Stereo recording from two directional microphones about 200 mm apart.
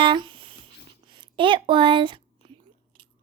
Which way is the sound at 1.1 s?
25° right (ahead or behind).